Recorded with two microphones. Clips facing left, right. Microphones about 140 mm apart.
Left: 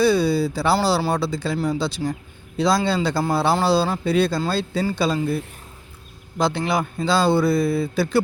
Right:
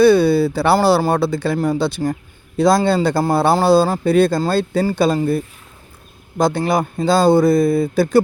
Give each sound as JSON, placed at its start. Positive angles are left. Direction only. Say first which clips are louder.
{"t": 0.0, "sound": "speech", "louder": "right 6 dB", "side_deg": -60}
{"t": 6.4, "sound": "speech", "louder": "right 5 dB", "side_deg": -45}